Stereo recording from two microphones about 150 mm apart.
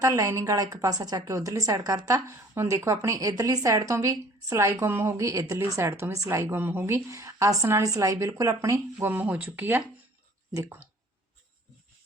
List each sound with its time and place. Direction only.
0.0 s speech: 20° right (ahead or behind)